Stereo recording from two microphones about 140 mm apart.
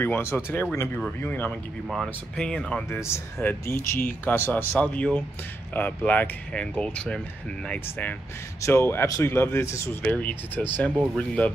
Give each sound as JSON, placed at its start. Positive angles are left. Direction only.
{"t": 0.0, "sound": "speech", "side_deg": 15}
{"t": 1.9, "sound": "speech", "side_deg": 0}
{"t": 2.9, "sound": "speech", "side_deg": 20}
{"t": 8.5, "sound": "speech", "side_deg": 20}